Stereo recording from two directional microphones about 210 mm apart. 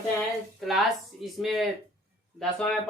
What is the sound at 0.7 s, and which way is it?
Speech, centre (ahead or behind).